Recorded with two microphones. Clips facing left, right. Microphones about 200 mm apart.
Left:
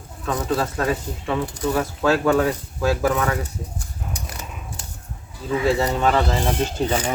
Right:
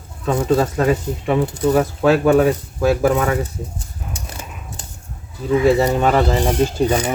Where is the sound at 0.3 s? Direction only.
25° right (ahead or behind).